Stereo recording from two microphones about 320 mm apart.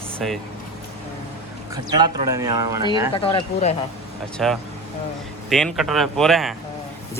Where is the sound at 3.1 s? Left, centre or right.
Centre.